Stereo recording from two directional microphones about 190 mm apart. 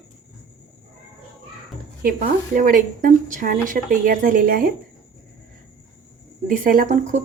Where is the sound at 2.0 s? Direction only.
50° right (ahead or behind).